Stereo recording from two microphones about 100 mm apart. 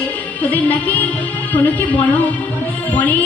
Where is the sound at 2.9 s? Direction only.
15° left (ahead or behind).